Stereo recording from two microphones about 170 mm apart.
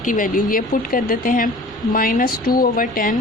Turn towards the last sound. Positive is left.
turn(degrees=55)  # may be behind; listen again after turning